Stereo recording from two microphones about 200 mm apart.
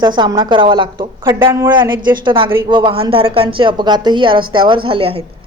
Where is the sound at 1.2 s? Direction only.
15° right (ahead or behind).